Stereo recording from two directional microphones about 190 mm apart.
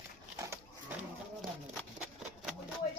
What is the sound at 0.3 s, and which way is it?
Dog, 15° right (ahead or behind).